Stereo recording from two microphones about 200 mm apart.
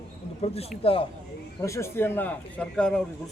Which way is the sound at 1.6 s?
15° left (ahead or behind).